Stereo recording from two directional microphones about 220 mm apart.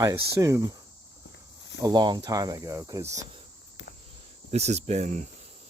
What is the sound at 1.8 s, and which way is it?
Speech, 20° right (ahead or behind).